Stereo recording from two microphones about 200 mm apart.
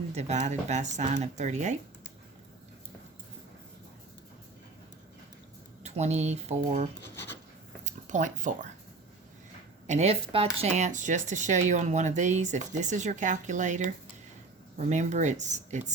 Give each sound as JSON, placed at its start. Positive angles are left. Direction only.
{"t": 0.1, "sound": "speech", "side_deg": -35}
{"t": 5.8, "sound": "speech", "side_deg": -35}
{"t": 7.9, "sound": "a sound", "side_deg": -40}
{"t": 9.8, "sound": "speech", "side_deg": -35}